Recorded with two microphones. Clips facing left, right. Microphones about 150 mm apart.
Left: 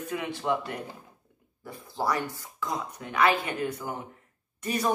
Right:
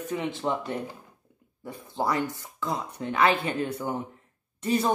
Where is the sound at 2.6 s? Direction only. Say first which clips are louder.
Right 2 dB; 25° right (ahead or behind).